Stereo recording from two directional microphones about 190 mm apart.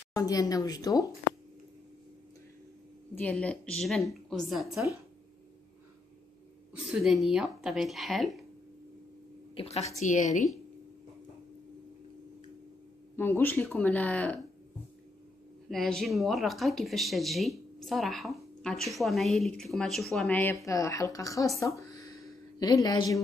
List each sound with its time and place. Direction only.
0.1 s speech: 20° left (ahead or behind)
3.2 s speech: 5° left (ahead or behind)
6.9 s speech: centre (ahead or behind)
9.6 s a woman's voice: 35° left (ahead or behind)
13.1 s speech: 10° left (ahead or behind)
15.7 s speech: centre (ahead or behind); by 21.5 s 20° left (ahead or behind)
21.5 s a sound: 15° left (ahead or behind)